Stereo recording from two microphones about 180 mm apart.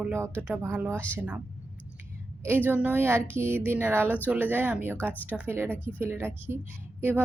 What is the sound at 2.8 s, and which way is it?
Speech, 10° right (ahead or behind).